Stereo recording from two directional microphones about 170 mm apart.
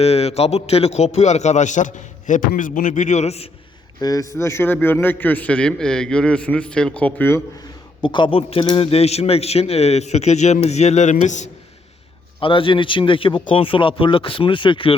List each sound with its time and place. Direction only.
0.0 s a man's voice: 35° left (ahead or behind)
4.0 s a man's voice: 20° left (ahead or behind)
8.0 s a man's voice: 25° left (ahead or behind); by 11.5 s 45° left (ahead or behind)
12.4 s a man's voice: 30° left (ahead or behind)